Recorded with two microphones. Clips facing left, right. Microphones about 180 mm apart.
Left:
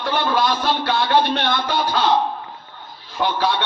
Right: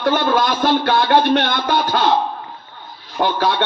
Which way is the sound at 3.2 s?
50° right (ahead or behind).